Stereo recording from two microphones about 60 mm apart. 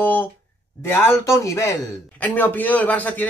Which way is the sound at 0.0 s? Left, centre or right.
Left.